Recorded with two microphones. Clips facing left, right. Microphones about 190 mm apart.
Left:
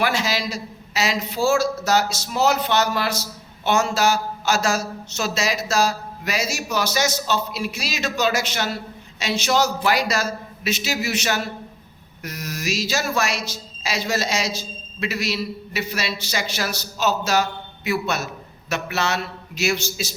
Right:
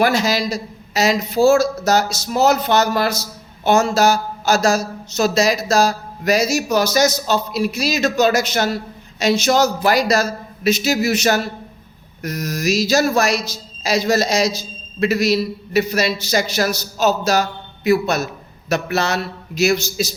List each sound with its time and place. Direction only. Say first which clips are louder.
0.0 s a man's voice: right 6 dB; 40° right (ahead or behind)